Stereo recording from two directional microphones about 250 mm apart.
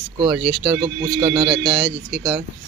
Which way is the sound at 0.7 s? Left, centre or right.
Centre.